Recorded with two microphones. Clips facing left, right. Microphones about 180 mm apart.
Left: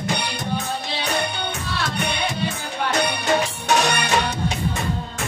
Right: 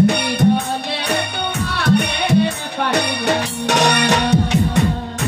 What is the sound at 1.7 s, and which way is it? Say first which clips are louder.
Music: right 9 dB; 65° right (ahead or behind).